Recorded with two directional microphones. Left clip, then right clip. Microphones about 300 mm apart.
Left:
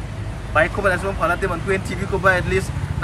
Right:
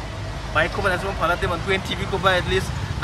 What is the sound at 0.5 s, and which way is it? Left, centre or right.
Speech, centre.